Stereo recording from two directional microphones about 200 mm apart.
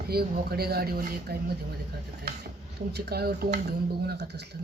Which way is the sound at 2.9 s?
50° right (ahead or behind).